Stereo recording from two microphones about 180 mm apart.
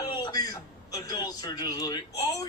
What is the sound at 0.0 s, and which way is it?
A man's voice, 20° left (ahead or behind).